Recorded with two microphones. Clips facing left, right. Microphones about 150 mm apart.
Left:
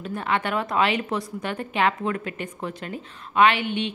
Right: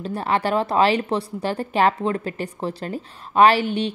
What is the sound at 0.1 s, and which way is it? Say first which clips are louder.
A woman's voice: right 4 dB; 35° right (ahead or behind).